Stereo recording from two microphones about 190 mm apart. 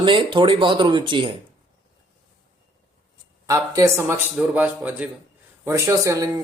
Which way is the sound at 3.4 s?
15° right (ahead or behind).